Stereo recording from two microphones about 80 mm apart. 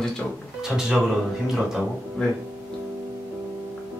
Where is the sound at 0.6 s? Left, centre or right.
Centre.